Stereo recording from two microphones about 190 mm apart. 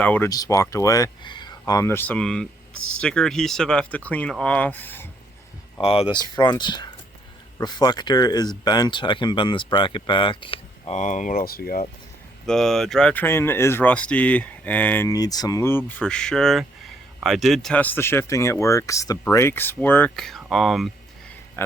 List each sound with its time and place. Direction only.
0.0 s speech: 10° left (ahead or behind)
0.3 s speech: 20° left (ahead or behind)
5.8 s speech: 30° left (ahead or behind); by 11.9 s 50° left (ahead or behind)
12.5 s speech: centre (ahead or behind)
16.0 s speech: 5° left (ahead or behind)